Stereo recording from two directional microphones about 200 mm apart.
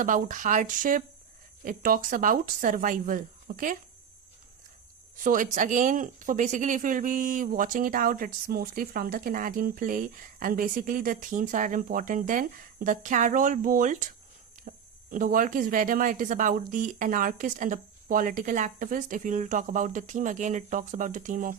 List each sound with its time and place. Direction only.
0.0 s speech: 40° right (ahead or behind)
5.2 s speech: 40° right (ahead or behind)
14.7 s a sound: 40° right (ahead or behind)
15.1 s speech: 40° right (ahead or behind)